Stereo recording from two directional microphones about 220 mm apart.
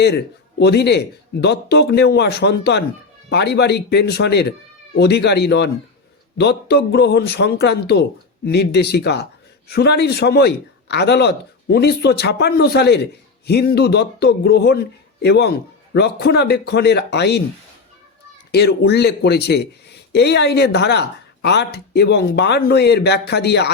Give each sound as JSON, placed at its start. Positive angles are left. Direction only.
{"t": 0.6, "sound": "speech", "side_deg": 50}
{"t": 18.5, "sound": "speech", "side_deg": 45}